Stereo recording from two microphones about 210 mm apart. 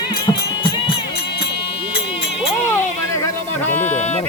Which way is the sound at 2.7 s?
15° left (ahead or behind).